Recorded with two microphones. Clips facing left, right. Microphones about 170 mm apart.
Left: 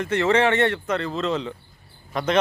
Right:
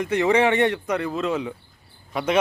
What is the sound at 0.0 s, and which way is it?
Speech, 15° right (ahead or behind).